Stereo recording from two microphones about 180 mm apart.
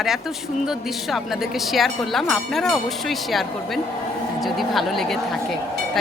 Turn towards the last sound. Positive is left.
turn(degrees=0)  # may be behind; listen again after turning